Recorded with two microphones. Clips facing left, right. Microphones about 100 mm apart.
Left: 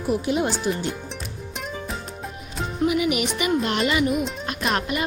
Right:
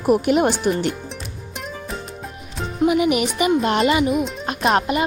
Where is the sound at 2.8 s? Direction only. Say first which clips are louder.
Right 5 dB; 35° right (ahead or behind).